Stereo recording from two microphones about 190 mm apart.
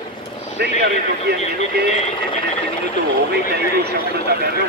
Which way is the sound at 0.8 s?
60° right (ahead or behind).